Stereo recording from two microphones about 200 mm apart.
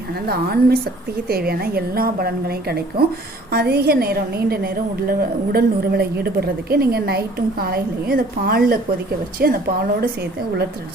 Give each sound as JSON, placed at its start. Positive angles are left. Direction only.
{"t": 0.3, "sound": "a woman's voice", "side_deg": -50}